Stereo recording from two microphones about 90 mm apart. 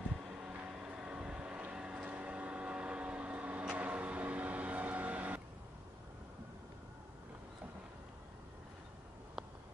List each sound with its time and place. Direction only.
0.3 s vehicle: 10° right (ahead or behind)